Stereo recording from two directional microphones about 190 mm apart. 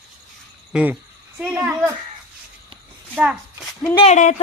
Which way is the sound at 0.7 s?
5° right (ahead or behind).